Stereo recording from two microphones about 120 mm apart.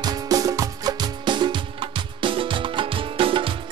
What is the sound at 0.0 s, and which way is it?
Music, 30° right (ahead or behind).